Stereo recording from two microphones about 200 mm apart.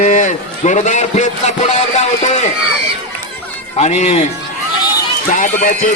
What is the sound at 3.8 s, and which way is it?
A man's voice, 35° left (ahead or behind).